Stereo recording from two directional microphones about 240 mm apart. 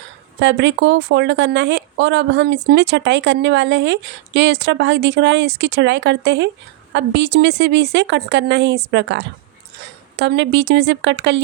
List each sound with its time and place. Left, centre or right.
0.3 s speech: right